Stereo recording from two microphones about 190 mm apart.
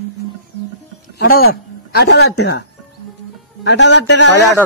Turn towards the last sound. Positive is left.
turn(degrees=70)  # may be behind; listen again after turning